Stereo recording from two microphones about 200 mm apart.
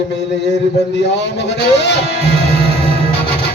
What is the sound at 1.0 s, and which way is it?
Speech, 60° left (ahead or behind).